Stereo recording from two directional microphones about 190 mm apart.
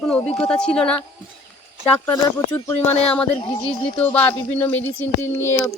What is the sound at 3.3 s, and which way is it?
Speech, 25° left (ahead or behind).